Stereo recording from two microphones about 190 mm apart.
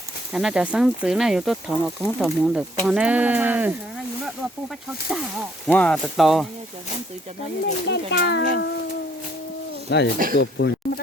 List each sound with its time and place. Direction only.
0.3 s speech: 5° right (ahead or behind)
5.6 s speech: 5° left (ahead or behind)
7.9 s a child's voice: 65° left (ahead or behind)
9.9 s a child's voice: 65° left (ahead or behind)